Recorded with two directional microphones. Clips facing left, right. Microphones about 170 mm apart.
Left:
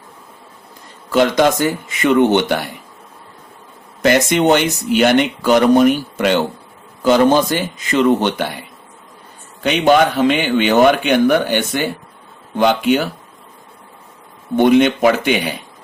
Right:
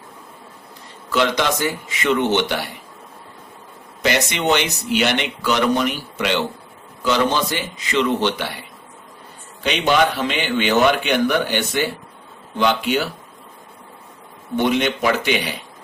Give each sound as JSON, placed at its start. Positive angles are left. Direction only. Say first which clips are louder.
{"t": 1.1, "sound": "speech", "louder": "left 6 dB", "side_deg": 50}
{"t": 4.0, "sound": "speech", "louder": "left 7 dB", "side_deg": 50}
{"t": 9.6, "sound": "speech", "louder": "left 5 dB", "side_deg": 50}
{"t": 14.5, "sound": "speech", "louder": "left 7 dB", "side_deg": 50}